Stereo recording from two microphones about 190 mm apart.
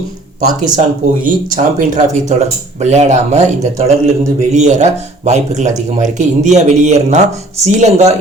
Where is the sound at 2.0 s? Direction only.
40° right (ahead or behind).